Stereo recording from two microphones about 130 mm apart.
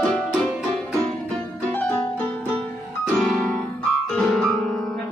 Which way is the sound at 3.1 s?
5° left (ahead or behind).